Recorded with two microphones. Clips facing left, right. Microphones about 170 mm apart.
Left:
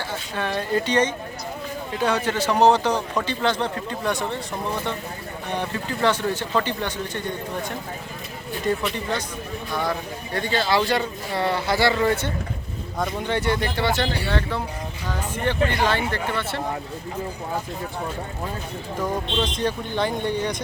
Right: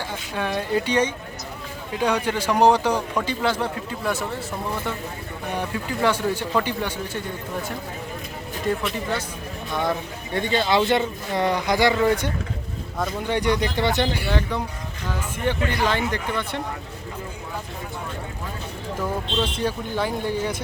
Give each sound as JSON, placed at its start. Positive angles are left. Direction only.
{"t": 0.3, "sound": "a man's voice", "side_deg": -10}
{"t": 5.5, "sound": "a man's voice", "side_deg": -10}
{"t": 8.6, "sound": "speech", "side_deg": 0}
{"t": 10.3, "sound": "a man's voice", "side_deg": -20}
{"t": 19.4, "sound": "speech", "side_deg": -5}